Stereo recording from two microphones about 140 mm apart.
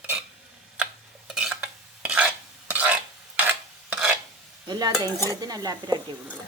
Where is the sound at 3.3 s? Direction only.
10° right (ahead or behind).